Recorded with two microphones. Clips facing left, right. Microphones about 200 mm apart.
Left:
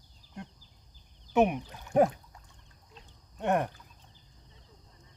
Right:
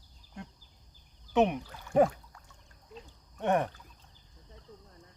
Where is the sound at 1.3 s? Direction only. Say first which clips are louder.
Left 1 dB; 15° left (ahead or behind).